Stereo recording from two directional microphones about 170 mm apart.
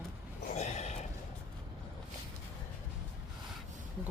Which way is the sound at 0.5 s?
40° left (ahead or behind).